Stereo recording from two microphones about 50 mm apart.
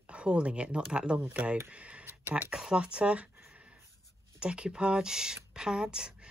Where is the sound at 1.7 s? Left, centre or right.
Right.